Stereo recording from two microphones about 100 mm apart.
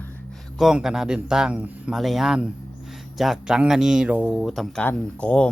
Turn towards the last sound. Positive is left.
turn(degrees=10)  # may be behind; listen again after turning